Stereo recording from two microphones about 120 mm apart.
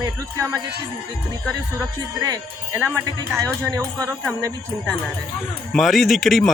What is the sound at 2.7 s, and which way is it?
Speech, 15° right (ahead or behind).